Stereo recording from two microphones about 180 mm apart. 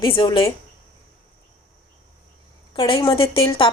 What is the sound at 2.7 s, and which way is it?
Speech, 30° left (ahead or behind).